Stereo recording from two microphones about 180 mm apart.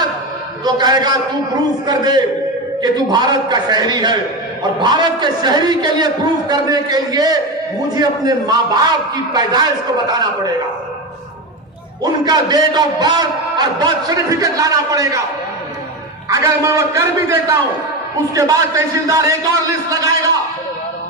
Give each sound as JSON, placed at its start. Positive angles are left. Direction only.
{"t": 0.6, "sound": "a man's voice", "side_deg": -25}
{"t": 12.2, "sound": "a man's voice", "side_deg": -20}
{"t": 16.3, "sound": "a man's voice", "side_deg": -15}